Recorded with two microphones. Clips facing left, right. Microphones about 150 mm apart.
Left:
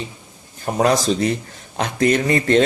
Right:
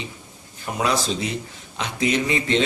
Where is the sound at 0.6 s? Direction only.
45° left (ahead or behind).